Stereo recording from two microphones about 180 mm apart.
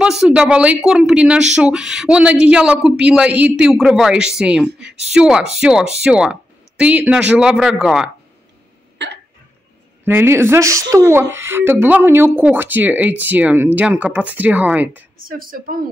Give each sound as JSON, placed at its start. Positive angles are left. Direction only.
{"t": 0.0, "sound": "speech", "side_deg": -5}
{"t": 8.9, "sound": "hiccup", "side_deg": -75}
{"t": 10.0, "sound": "speech", "side_deg": -10}
{"t": 15.2, "sound": "a woman's voice", "side_deg": -50}